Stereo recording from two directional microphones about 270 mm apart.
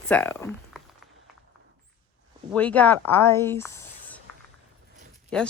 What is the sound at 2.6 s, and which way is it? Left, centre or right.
Speech, centre.